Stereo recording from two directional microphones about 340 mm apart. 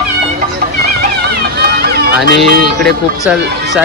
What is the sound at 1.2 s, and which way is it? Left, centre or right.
Music, right.